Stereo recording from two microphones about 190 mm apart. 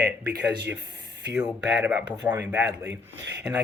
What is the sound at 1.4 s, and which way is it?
Speech, 10° right (ahead or behind).